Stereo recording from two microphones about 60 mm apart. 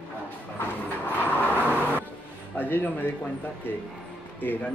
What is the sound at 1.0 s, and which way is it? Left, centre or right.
Speech, left.